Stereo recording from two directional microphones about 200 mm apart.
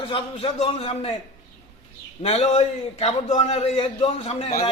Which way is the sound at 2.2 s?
30° left (ahead or behind).